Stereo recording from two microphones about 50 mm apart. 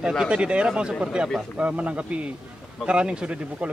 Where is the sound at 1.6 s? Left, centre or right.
Right.